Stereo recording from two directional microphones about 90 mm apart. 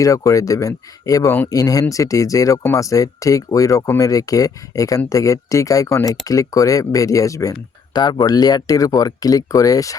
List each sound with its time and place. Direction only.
0.0 s speech: 40° left (ahead or behind)
7.9 s speech: 50° left (ahead or behind)